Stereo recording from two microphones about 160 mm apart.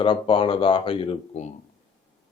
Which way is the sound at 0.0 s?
35° left (ahead or behind).